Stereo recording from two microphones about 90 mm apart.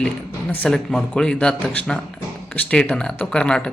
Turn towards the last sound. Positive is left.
turn(degrees=10)  # may be behind; listen again after turning